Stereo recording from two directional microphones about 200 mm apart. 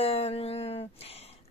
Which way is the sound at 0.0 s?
30° left (ahead or behind).